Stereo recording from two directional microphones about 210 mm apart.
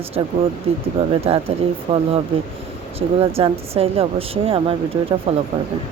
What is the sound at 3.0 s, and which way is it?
Speech, 30° right (ahead or behind).